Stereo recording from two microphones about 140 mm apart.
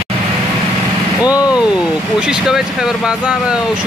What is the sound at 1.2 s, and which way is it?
Speech, 30° left (ahead or behind).